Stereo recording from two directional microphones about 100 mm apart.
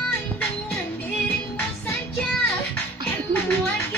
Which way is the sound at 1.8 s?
15° left (ahead or behind).